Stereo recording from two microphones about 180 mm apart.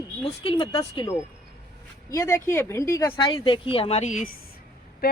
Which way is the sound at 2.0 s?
15° left (ahead or behind).